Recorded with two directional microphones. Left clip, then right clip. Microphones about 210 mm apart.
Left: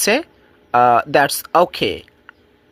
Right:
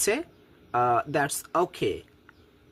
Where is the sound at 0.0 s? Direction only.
35° left (ahead or behind).